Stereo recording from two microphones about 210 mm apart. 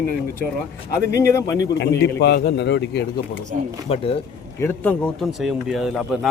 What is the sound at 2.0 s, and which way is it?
A man's voice, 50° left (ahead or behind).